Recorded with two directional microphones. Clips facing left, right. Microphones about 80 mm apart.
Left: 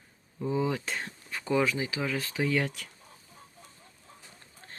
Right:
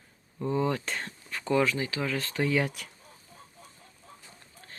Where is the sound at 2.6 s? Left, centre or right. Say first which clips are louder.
Right 2 dB; centre.